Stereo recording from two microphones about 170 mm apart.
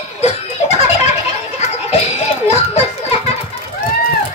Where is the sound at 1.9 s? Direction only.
40° left (ahead or behind).